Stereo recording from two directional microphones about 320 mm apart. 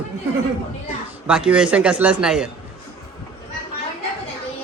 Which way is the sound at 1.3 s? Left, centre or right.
Centre.